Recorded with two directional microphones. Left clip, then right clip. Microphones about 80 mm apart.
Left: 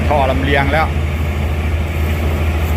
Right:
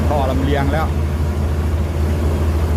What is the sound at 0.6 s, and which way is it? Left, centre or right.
Speech, centre.